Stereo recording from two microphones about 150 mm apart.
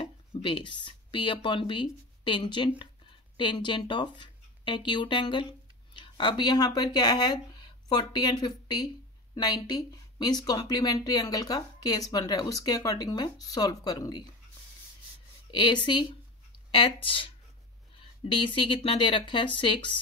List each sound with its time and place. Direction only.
0.0 s speech: 35° left (ahead or behind)
15.5 s speech: 30° left (ahead or behind)